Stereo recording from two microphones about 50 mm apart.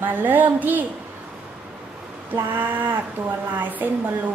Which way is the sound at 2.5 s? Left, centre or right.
Right.